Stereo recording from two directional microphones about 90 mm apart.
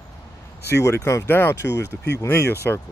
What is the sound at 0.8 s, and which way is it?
Speech, 30° left (ahead or behind).